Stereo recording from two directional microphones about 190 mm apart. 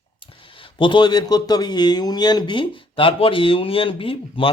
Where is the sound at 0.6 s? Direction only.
25° left (ahead or behind).